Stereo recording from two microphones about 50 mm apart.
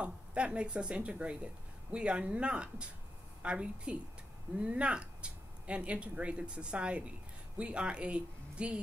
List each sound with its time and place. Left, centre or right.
0.0 s speech: right